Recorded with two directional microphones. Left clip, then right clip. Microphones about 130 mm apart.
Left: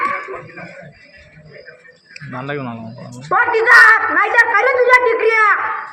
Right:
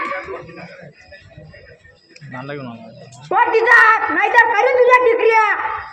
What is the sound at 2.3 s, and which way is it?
Speech, 25° left (ahead or behind).